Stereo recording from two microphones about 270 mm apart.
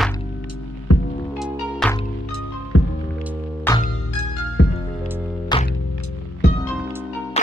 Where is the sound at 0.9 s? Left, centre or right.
Left.